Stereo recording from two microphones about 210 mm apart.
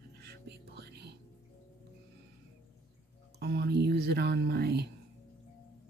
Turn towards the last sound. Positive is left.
turn(degrees=-50)  # may be behind; listen again after turning